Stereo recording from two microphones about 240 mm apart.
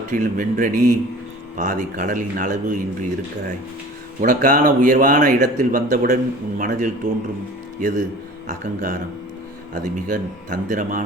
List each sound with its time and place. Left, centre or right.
0.1 s speech: right
4.2 s speech: right